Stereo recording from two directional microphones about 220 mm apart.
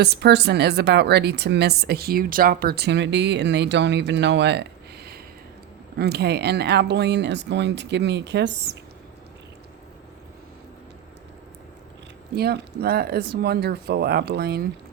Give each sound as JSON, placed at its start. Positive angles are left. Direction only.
{"t": 0.0, "sound": "a woman's voice", "side_deg": -50}
{"t": 12.3, "sound": "a woman's voice", "side_deg": -45}